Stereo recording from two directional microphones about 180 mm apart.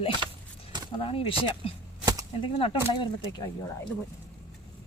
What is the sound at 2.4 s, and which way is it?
Speech, 30° left (ahead or behind).